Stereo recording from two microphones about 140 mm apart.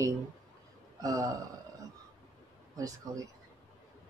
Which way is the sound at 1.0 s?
25° right (ahead or behind).